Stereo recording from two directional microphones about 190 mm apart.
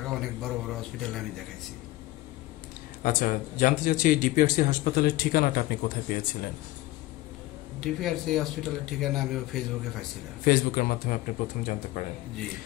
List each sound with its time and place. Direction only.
0.0 s a man's voice: centre (ahead or behind)
3.0 s speech: 45° left (ahead or behind)
7.8 s speech: centre (ahead or behind)
10.4 s speech: 50° left (ahead or behind)